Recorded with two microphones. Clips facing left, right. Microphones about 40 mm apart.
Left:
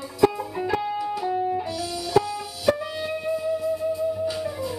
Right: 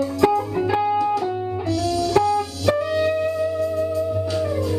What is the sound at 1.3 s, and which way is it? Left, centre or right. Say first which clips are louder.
Music: left 1 dB; centre.